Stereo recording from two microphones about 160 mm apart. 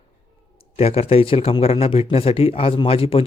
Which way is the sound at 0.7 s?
40° left (ahead or behind).